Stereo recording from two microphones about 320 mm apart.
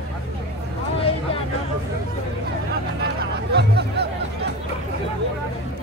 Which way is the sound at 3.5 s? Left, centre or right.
Right.